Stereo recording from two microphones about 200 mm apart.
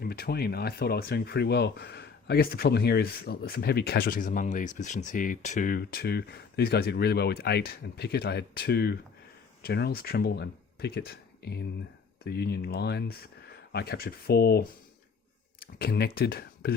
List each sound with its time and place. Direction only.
0.0 s speech: 50° left (ahead or behind)